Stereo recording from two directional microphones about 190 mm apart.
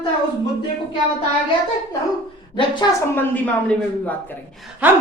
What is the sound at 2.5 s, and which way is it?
Speech, 25° left (ahead or behind).